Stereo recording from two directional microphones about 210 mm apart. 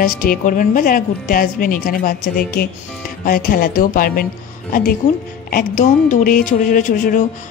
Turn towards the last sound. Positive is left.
turn(degrees=40)  # may be behind; listen again after turning